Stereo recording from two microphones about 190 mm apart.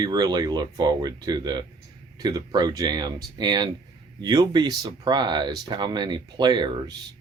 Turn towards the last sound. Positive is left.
turn(degrees=-20)  # may be behind; listen again after turning